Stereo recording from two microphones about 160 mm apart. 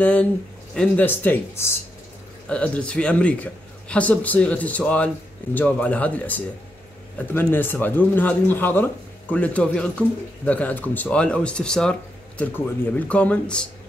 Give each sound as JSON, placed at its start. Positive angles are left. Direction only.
{"t": 0.0, "sound": "speech", "side_deg": 10}